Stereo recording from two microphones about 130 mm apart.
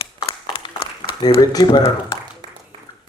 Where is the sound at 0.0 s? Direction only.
40° left (ahead or behind).